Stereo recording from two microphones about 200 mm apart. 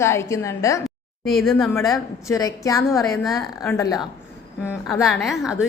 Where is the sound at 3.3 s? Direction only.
15° left (ahead or behind).